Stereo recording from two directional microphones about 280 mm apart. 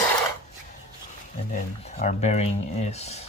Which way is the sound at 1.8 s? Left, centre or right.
Left.